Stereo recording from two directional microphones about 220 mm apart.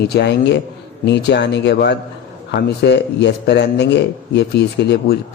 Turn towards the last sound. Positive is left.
turn(degrees=50)  # may be behind; listen again after turning